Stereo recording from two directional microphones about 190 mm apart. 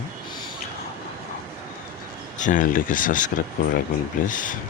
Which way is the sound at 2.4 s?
40° left (ahead or behind).